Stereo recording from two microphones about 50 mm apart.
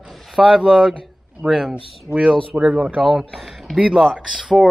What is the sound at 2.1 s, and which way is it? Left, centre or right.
Speech, left.